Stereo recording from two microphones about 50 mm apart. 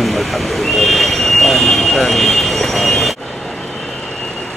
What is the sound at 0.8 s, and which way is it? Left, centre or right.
Vehicle, centre.